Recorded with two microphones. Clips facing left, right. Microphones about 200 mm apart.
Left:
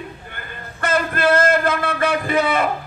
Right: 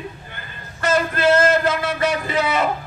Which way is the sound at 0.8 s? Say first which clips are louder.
Right 1 dB; 55° left (ahead or behind).